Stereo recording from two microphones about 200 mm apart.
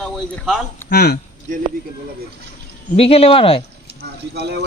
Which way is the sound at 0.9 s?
55° left (ahead or behind).